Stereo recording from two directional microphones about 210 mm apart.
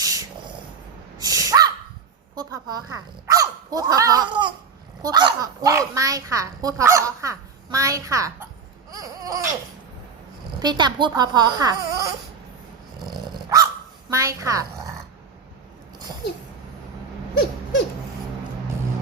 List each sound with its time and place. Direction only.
0.0 s a sound: 15° right (ahead or behind)
2.3 s a child's voice: 20° right (ahead or behind)
8.9 s a sound: 15° right (ahead or behind)
10.6 s speech: 20° right (ahead or behind)
13.1 s dog: 20° right (ahead or behind)
14.1 s a child's voice: 15° right (ahead or behind)